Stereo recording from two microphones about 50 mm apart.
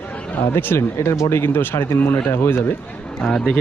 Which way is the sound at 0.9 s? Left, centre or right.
Left.